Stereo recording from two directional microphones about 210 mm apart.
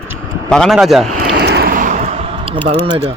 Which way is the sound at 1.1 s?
50° right (ahead or behind).